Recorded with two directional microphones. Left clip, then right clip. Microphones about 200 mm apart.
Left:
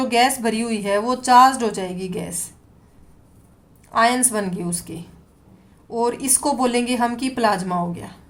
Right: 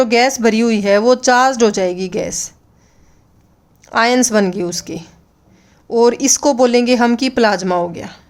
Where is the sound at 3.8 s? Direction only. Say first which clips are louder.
Right 4 dB; 45° right (ahead or behind).